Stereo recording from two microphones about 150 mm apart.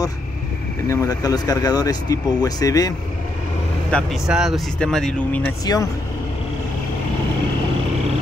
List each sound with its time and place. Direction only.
0.8 s speech: 20° left (ahead or behind)
3.9 s speech: centre (ahead or behind)